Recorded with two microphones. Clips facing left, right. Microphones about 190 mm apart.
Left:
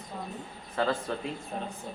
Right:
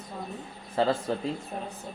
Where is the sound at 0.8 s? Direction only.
30° right (ahead or behind).